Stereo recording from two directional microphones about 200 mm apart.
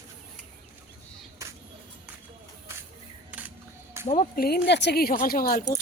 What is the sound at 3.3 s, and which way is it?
Music, 10° right (ahead or behind).